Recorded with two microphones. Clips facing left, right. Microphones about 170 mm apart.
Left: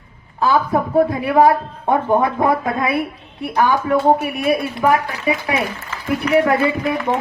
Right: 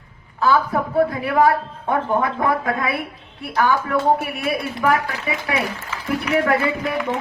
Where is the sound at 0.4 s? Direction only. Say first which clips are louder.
Left 2 dB; 20° left (ahead or behind).